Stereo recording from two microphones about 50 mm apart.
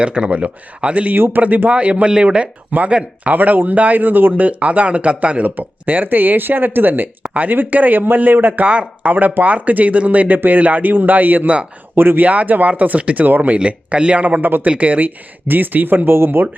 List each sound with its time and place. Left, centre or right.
0.0 s speech: right
1.1 s speech: right
8.6 s speech: right
9.1 s speech: right
12.2 s speech: right
13.6 s speech: right